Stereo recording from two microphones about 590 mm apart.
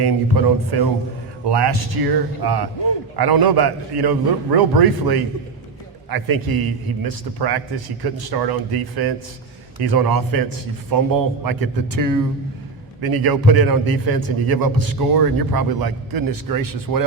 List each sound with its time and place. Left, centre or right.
0.0 s a man's voice: right